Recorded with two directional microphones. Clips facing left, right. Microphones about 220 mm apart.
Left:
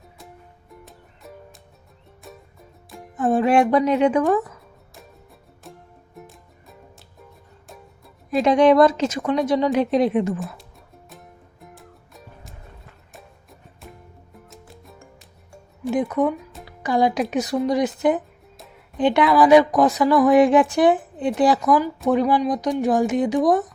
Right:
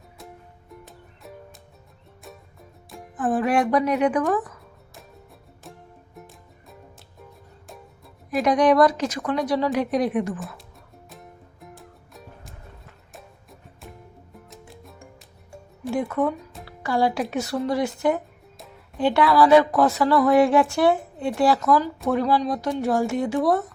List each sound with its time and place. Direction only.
0.7 s music: centre (ahead or behind)
3.2 s a woman's voice: 25° left (ahead or behind)
5.7 s music: centre (ahead or behind)
8.4 s a woman's voice: 25° left (ahead or behind)
11.1 s music: centre (ahead or behind)
15.9 s a woman's voice: 20° left (ahead or behind)